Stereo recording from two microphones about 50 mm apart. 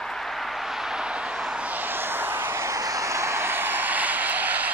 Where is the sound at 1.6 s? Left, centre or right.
Right.